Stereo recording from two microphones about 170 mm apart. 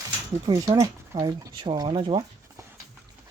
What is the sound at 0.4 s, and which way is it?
Speech, 25° right (ahead or behind).